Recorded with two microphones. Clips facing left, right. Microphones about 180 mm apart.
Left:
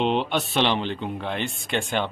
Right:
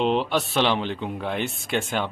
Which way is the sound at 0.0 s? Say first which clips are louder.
Right 1 dB; centre (ahead or behind).